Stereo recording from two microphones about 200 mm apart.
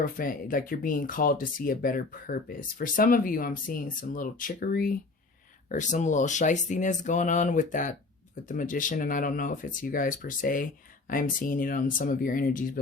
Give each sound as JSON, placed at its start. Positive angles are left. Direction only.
{"t": 0.0, "sound": "speech", "side_deg": 45}